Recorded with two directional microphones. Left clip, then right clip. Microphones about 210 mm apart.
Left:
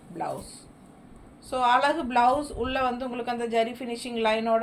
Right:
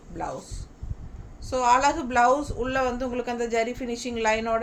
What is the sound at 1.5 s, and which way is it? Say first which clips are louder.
Speech: right 1 dB; 25° right (ahead or behind).